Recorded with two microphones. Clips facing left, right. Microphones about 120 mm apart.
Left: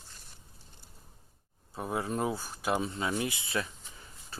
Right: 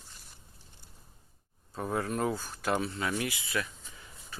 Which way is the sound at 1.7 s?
15° left (ahead or behind).